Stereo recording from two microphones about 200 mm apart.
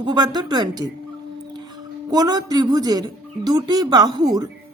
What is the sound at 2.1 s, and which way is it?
Speech, 20° right (ahead or behind).